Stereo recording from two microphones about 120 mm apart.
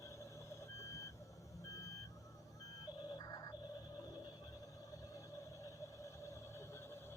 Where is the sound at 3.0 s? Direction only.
35° left (ahead or behind).